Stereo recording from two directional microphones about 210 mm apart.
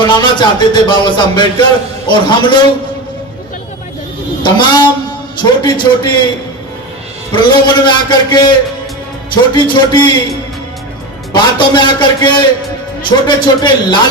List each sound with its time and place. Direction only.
0.0 s speech: 20° left (ahead or behind)
4.4 s speech: 20° left (ahead or behind)
7.3 s speech: 20° left (ahead or behind)
11.3 s speech: 20° left (ahead or behind)